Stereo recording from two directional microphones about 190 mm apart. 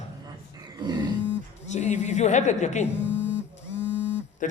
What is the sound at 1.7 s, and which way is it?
A woman's voice, 40° left (ahead or behind).